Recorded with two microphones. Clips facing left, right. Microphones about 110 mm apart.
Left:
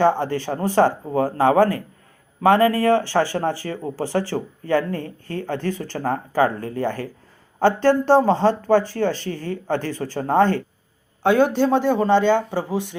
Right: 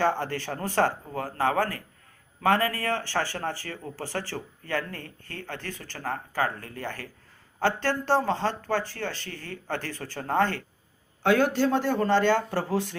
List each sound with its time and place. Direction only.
0.0 s speech: 20° left (ahead or behind)
11.2 s a man's voice: 15° left (ahead or behind)